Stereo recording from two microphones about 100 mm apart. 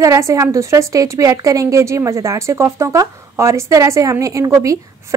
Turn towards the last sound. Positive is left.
turn(degrees=-30)  # may be behind; listen again after turning